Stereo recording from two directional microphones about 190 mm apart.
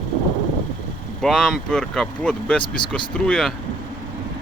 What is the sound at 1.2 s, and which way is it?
Speech, 5° left (ahead or behind).